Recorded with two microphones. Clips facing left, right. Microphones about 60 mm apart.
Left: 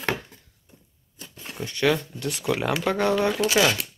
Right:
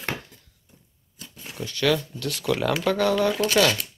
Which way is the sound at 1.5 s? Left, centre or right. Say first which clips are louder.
Even; left.